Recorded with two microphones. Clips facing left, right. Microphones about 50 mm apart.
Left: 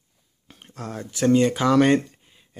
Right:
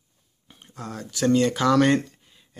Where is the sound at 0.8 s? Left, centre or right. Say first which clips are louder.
Left 1 dB; left.